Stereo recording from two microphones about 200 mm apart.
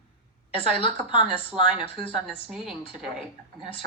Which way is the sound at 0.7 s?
25° left (ahead or behind).